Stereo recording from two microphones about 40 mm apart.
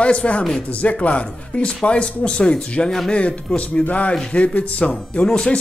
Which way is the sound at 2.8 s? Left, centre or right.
Centre.